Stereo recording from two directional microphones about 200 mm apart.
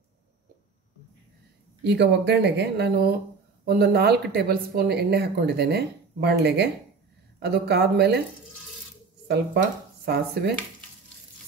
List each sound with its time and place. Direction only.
1.9 s speech: 60° right (ahead or behind)
9.6 s speech: 55° right (ahead or behind)